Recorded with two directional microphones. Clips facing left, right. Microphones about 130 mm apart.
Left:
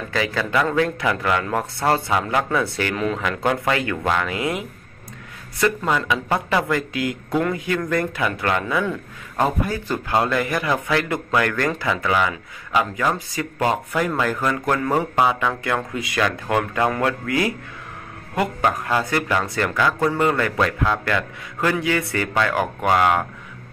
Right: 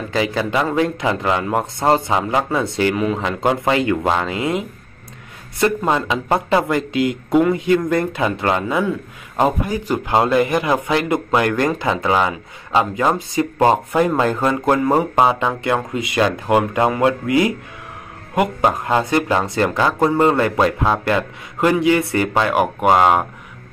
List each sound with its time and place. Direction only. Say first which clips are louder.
0.1 s speech: right 3 dB; 20° right (ahead or behind)